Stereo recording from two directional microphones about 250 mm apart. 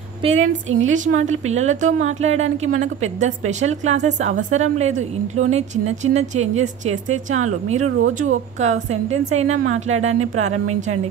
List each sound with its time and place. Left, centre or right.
0.2 s speech: right
0.7 s a woman's voice: right
0.9 s speech: right
7.8 s speech: right
8.5 s speech: right